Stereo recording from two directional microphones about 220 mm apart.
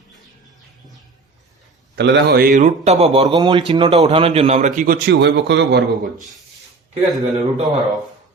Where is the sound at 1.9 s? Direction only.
50° right (ahead or behind).